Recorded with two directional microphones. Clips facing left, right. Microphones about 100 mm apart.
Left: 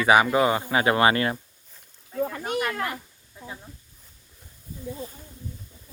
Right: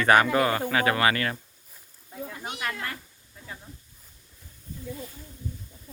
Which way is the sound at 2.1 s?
70° left (ahead or behind).